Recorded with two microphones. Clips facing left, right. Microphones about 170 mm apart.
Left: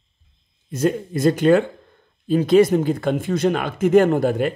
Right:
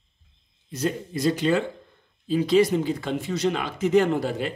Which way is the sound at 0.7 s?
50° left (ahead or behind).